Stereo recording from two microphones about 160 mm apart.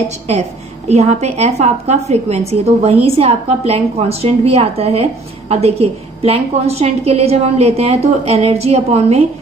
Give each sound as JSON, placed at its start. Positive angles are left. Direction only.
{"t": 0.8, "sound": "a woman's voice", "side_deg": -40}